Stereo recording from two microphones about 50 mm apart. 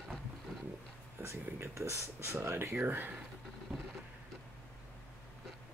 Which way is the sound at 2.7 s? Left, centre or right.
Right.